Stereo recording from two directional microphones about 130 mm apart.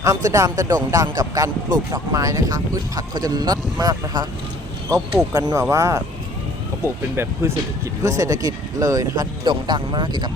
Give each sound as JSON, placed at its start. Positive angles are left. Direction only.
{"t": 0.0, "sound": "speech", "side_deg": -25}
{"t": 5.3, "sound": "speech", "side_deg": -30}